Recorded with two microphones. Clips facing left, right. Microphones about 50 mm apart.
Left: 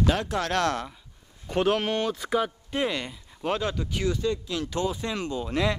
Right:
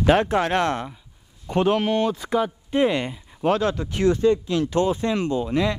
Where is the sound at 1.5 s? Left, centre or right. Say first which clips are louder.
Right 4 dB; centre.